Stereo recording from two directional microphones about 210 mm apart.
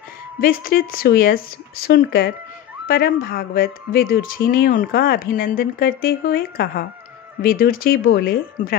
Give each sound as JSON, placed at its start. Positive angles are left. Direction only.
{"t": 0.4, "sound": "speech", "side_deg": 45}